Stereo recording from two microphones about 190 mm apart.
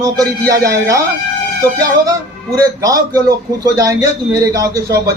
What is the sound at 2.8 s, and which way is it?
A man's voice, 20° right (ahead or behind).